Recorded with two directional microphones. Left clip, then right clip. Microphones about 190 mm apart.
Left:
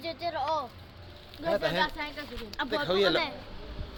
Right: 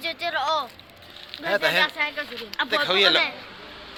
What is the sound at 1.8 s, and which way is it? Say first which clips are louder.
Speech: right 8 dB; 15° right (ahead or behind).